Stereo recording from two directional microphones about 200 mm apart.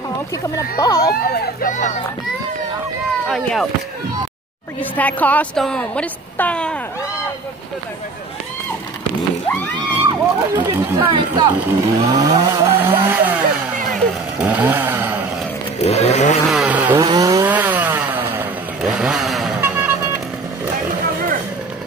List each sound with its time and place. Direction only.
0.7 s speech: 20° left (ahead or behind)
1.0 s speech: 50° left (ahead or behind)
3.3 s a woman's voice: centre (ahead or behind)
4.9 s a woman's voice: 10° left (ahead or behind)
10.1 s speech: 10° right (ahead or behind)
11.0 s speech: 25° right (ahead or behind); by 13.7 s 10° right (ahead or behind)
14.4 s chainsaw: 10° right (ahead or behind)
15.8 s vehicle: 30° left (ahead or behind)
16.4 s chainsaw: 5° right (ahead or behind)
17.0 s chainsaw: 20° right (ahead or behind)